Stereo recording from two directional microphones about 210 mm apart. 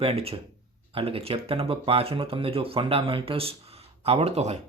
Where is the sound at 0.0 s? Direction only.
30° right (ahead or behind).